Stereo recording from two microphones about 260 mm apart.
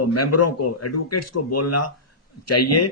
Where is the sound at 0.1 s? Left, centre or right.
Left.